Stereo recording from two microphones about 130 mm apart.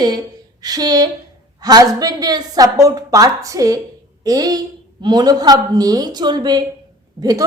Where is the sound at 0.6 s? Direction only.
30° right (ahead or behind).